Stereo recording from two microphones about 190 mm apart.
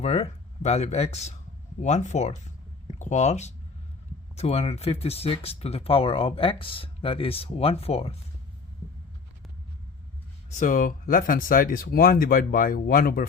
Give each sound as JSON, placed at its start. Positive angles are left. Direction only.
{"t": 0.0, "sound": "speech", "side_deg": 35}
{"t": 10.5, "sound": "speech", "side_deg": 40}